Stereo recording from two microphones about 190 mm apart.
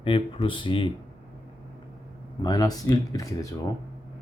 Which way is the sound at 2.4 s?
20° left (ahead or behind).